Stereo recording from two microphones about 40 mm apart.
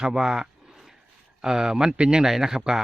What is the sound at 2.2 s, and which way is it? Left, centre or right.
Speech, centre.